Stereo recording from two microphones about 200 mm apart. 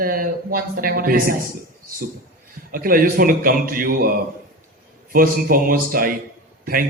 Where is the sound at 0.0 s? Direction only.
45° right (ahead or behind).